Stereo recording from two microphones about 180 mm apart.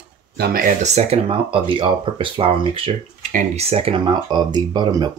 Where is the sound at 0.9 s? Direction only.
30° right (ahead or behind).